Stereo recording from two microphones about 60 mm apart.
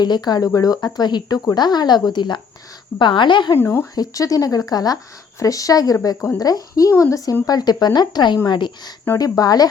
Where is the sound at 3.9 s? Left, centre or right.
Left.